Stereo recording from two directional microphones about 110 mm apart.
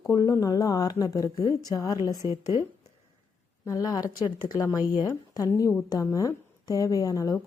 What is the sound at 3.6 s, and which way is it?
Speech, 35° left (ahead or behind).